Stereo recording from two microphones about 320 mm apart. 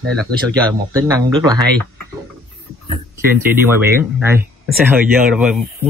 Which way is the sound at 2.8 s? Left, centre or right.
Centre.